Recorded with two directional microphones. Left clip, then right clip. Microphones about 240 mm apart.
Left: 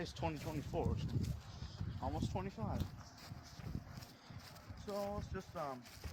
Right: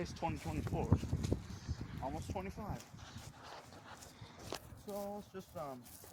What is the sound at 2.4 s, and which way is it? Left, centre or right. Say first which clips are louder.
Speech: right 1 dB; centre.